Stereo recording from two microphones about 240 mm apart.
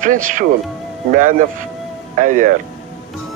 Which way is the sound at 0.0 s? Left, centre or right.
Right.